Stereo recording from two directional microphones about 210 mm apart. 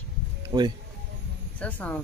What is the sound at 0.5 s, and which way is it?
Speech, 25° right (ahead or behind).